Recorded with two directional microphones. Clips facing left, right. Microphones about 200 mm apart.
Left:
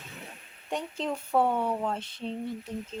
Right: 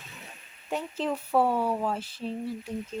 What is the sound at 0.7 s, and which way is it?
Speech, 5° right (ahead or behind).